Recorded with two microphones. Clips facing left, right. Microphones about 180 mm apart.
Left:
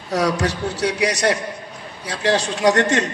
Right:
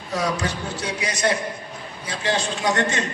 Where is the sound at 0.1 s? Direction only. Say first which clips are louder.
Left 5 dB; 75° left (ahead or behind).